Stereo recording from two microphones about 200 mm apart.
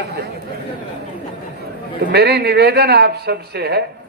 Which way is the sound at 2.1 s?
55° right (ahead or behind).